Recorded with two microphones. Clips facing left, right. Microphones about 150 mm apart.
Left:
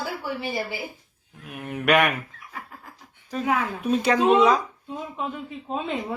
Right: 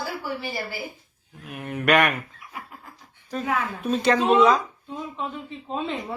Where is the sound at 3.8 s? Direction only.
10° left (ahead or behind).